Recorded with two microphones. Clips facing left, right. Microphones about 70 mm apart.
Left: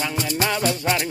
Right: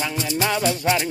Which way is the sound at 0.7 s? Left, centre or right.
Centre.